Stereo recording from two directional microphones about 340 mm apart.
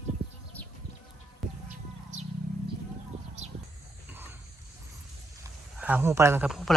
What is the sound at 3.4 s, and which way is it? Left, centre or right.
Horse, centre.